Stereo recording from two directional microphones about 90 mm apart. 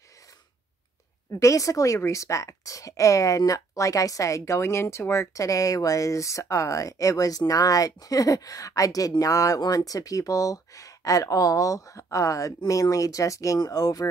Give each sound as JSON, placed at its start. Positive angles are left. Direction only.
{"t": 1.3, "sound": "speech", "side_deg": 35}